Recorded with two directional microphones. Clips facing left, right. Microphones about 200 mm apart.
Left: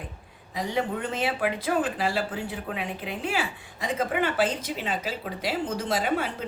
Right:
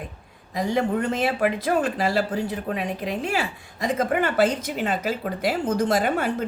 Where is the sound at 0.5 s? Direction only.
45° right (ahead or behind).